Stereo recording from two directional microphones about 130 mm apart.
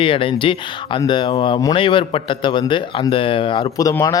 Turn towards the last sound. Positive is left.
turn(degrees=30)  # may be behind; listen again after turning